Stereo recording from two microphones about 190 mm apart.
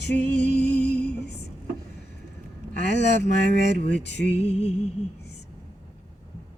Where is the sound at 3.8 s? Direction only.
40° right (ahead or behind).